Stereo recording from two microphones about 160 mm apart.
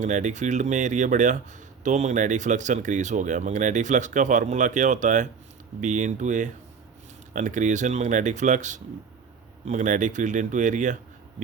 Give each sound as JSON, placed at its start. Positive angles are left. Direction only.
{"t": 0.0, "sound": "speech", "side_deg": -50}